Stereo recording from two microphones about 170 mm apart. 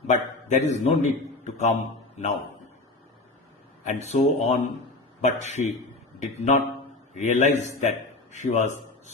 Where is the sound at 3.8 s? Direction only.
45° left (ahead or behind).